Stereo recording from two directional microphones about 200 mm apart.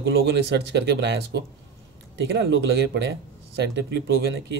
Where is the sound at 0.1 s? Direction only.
60° right (ahead or behind).